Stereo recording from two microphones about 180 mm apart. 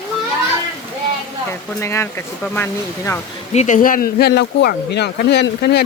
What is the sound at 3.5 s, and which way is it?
Speech, 40° left (ahead or behind).